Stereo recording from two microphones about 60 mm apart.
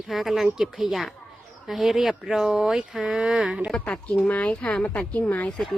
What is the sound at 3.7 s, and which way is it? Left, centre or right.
Speech, centre.